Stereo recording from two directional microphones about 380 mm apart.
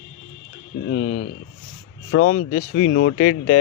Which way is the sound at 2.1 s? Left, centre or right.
Left.